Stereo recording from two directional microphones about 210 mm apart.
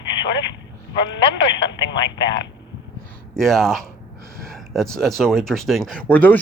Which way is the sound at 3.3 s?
Centre (ahead or behind).